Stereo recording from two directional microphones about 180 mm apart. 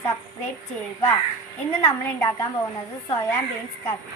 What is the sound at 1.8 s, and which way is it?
Speech, 20° left (ahead or behind).